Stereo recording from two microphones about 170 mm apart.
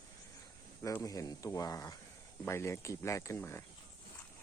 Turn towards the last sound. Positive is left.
turn(degrees=15)  # may be behind; listen again after turning